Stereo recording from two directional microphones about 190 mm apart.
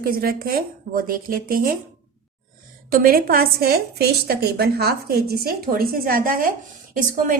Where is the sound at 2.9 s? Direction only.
50° right (ahead or behind).